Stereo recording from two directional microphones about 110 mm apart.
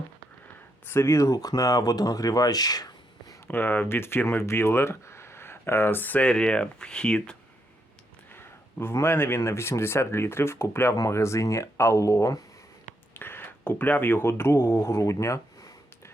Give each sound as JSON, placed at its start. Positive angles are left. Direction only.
{"t": 0.9, "sound": "speech", "side_deg": 20}
{"t": 3.4, "sound": "speech", "side_deg": 20}
{"t": 8.8, "sound": "speech", "side_deg": 20}
{"t": 13.1, "sound": "a sound", "side_deg": 20}